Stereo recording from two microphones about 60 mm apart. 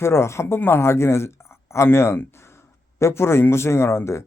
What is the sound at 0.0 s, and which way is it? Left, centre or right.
A man's voice, left.